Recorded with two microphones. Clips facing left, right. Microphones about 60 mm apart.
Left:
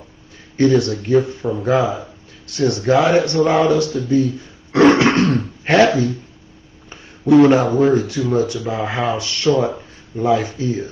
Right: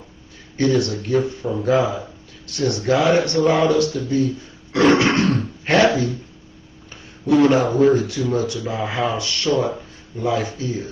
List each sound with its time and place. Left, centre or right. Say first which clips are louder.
0.6 s speech: left 4 dB; left
4.7 s grunt: left 3 dB; left
6.9 s a sound: left 5 dB; left
7.9 s speech: left 2 dB; left